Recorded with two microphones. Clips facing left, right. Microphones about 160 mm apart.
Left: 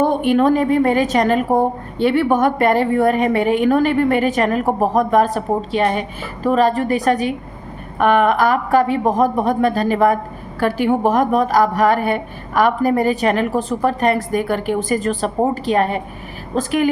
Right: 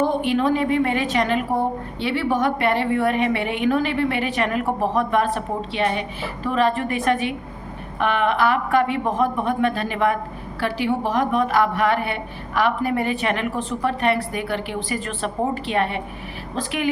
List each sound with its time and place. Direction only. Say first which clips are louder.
0.0 s a woman's voice: left 5 dB; 55° left (ahead or behind)